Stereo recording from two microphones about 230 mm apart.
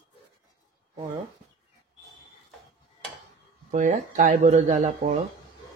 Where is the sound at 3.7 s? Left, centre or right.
Right.